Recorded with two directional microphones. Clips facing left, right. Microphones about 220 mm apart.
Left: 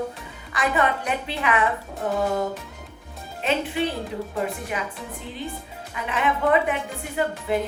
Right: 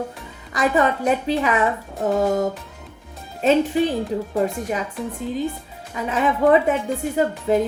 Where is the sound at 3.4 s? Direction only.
40° right (ahead or behind).